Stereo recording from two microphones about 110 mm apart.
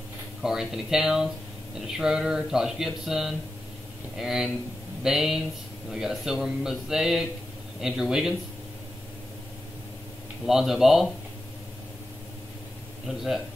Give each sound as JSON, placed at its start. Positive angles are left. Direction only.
{"t": 0.4, "sound": "speech", "side_deg": -5}
{"t": 10.4, "sound": "speech", "side_deg": 0}
{"t": 13.0, "sound": "speech", "side_deg": 0}